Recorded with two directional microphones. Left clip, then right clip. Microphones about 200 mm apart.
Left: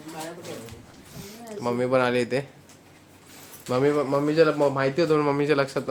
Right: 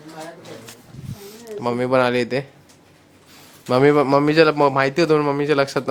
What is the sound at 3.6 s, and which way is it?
A man's voice, 40° right (ahead or behind).